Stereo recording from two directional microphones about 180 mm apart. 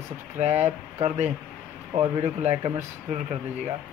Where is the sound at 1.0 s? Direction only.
40° right (ahead or behind).